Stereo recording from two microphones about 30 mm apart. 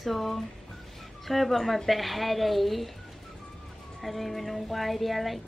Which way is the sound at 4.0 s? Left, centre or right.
Centre.